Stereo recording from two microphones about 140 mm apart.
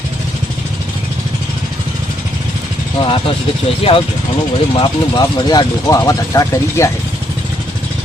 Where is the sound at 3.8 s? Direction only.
40° left (ahead or behind).